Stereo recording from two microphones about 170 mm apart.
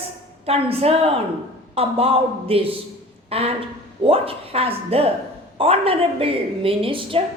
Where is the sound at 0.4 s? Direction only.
35° right (ahead or behind).